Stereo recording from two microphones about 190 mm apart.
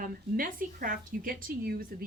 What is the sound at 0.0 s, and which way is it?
Speech, 45° right (ahead or behind).